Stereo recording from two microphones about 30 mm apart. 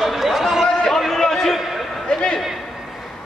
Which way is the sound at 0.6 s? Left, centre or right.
Centre.